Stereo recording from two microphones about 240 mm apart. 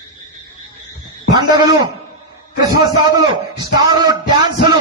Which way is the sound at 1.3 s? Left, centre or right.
Centre.